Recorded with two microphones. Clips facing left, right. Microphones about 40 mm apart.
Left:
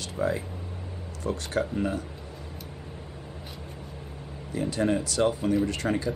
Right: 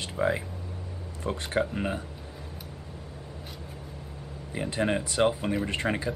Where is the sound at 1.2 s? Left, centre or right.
Right.